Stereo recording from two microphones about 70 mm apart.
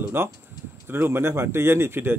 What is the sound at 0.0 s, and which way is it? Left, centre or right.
A man's voice, right.